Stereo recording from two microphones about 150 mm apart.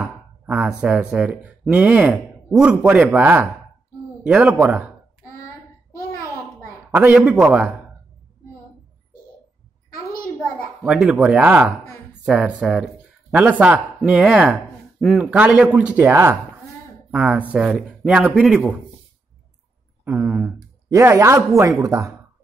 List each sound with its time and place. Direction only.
0.0 s speech: 5° right (ahead or behind)
6.9 s speech: 10° right (ahead or behind)
10.4 s a sound: 5° left (ahead or behind)
10.9 s speech: 5° right (ahead or behind)
20.1 s speech: 10° right (ahead or behind)